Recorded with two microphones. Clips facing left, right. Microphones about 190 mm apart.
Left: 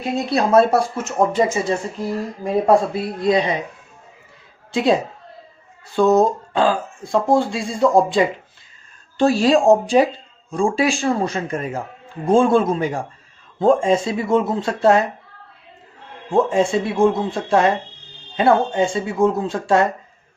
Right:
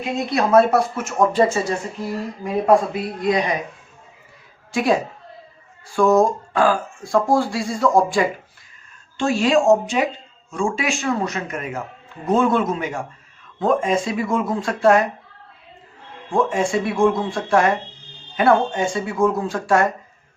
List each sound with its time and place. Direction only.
0.3 s speech: 30° left (ahead or behind)
2.4 s speech: 30° left (ahead or behind)
4.7 s a woman's voice: 25° left (ahead or behind)
9.1 s a man's voice: 35° left (ahead or behind)
16.3 s speech: 25° left (ahead or behind)